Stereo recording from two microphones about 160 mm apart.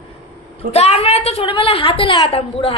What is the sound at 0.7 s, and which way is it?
A woman's voice, 40° left (ahead or behind).